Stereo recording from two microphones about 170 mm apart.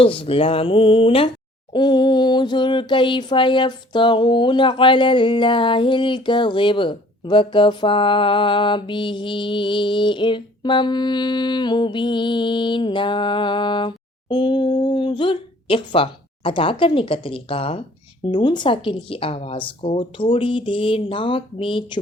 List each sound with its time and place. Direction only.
0.0 s a woman's voice: 35° left (ahead or behind)
1.7 s a sound: 25° left (ahead or behind)
18.3 s a woman's voice: 25° left (ahead or behind)